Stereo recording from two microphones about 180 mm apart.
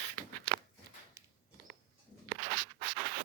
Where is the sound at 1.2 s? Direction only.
15° right (ahead or behind).